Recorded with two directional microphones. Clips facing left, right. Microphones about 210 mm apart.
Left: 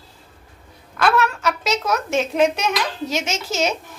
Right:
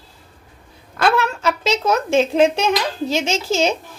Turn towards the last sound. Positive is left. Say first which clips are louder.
# right 4 dB
turn(degrees=-30)  # may be behind; listen again after turning